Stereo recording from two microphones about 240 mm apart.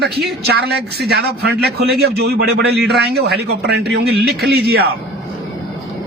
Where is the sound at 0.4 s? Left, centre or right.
Right.